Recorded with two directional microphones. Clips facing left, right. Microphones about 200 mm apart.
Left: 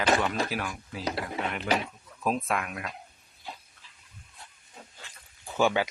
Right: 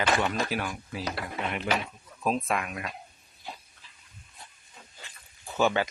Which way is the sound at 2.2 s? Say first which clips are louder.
Right 1 dB; centre (ahead or behind).